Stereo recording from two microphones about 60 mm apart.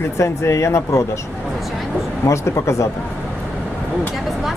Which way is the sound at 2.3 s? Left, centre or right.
Left.